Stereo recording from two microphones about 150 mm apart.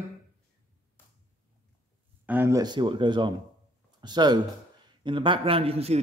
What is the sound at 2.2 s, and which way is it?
A man's voice, 15° right (ahead or behind).